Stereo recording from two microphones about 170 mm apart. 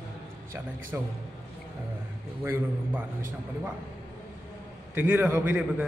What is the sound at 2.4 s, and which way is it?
A man's voice, 10° right (ahead or behind).